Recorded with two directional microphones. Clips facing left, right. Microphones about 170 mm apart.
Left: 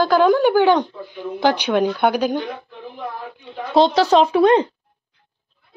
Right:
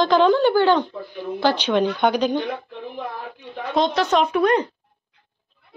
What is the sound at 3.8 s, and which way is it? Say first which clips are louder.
Speech: left 5 dB; 30° left (ahead or behind).